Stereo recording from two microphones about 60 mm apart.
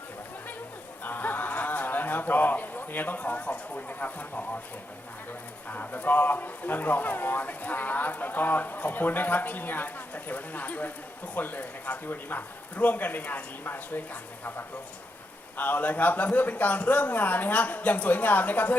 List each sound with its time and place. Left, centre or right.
1.0 s speech: left
5.6 s speech: left
15.5 s speech: left